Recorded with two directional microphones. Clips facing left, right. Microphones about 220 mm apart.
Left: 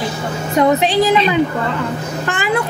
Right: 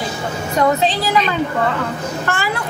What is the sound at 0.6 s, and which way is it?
Speech, 20° left (ahead or behind).